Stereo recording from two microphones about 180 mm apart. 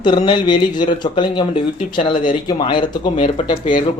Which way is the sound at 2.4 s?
25° left (ahead or behind).